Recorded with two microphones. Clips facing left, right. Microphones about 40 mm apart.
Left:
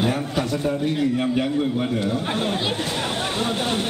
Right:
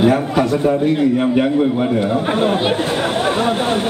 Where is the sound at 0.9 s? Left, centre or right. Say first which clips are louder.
Right 7 dB; right.